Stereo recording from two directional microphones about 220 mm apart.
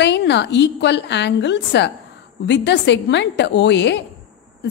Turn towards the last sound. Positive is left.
turn(degrees=50)  # may be behind; listen again after turning